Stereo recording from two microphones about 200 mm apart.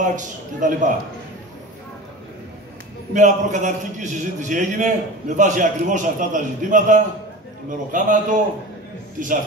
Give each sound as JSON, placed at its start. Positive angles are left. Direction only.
{"t": 0.0, "sound": "a man's voice", "side_deg": -40}
{"t": 3.1, "sound": "a man's voice", "side_deg": -40}